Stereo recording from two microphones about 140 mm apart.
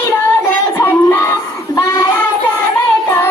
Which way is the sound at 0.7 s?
15° left (ahead or behind).